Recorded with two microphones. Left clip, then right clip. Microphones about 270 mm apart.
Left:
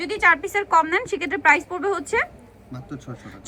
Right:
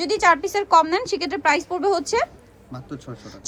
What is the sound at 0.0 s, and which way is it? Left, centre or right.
A woman's voice, centre.